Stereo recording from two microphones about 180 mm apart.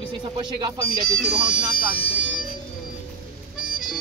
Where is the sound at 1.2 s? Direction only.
5° right (ahead or behind).